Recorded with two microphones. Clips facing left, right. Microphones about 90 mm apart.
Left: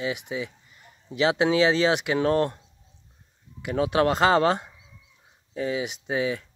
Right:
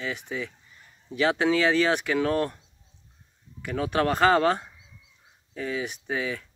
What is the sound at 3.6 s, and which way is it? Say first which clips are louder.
Speech: left 3 dB; 25° left (ahead or behind).